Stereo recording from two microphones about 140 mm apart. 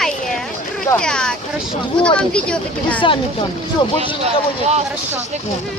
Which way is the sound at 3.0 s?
40° left (ahead or behind).